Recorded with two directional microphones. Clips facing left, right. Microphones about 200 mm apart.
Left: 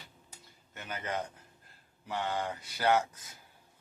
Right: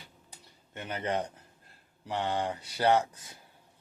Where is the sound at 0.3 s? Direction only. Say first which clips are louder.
Right 1 dB; 30° right (ahead or behind).